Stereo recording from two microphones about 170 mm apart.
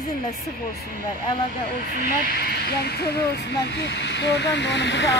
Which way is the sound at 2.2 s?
65° left (ahead or behind).